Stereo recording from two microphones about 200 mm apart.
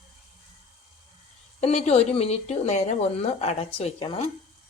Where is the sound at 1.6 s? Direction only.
30° left (ahead or behind).